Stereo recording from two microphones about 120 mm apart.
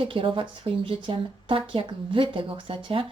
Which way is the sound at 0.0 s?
45° right (ahead or behind).